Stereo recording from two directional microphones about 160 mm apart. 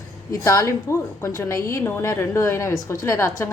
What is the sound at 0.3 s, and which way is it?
A woman's voice, 20° left (ahead or behind).